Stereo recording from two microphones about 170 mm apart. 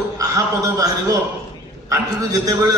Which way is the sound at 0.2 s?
20° right (ahead or behind).